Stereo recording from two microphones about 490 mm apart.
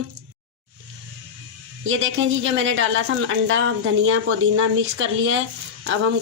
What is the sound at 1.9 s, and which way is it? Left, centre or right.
A woman's voice, right.